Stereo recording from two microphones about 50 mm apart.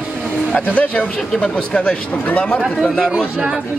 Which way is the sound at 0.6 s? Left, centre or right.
Left.